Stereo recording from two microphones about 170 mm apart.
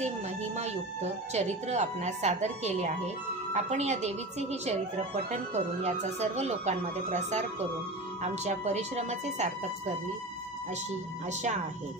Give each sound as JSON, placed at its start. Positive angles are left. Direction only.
{"t": 1.3, "sound": "a woman's voice", "side_deg": -40}
{"t": 11.2, "sound": "speech", "side_deg": -45}